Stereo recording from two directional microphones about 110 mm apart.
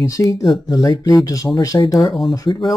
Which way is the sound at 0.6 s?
35° left (ahead or behind).